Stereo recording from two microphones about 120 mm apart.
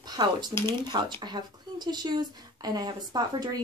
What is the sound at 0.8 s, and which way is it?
Speech, 35° right (ahead or behind).